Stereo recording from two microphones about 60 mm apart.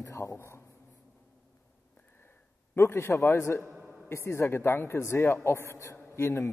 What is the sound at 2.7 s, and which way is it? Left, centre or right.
A woman's voice, left.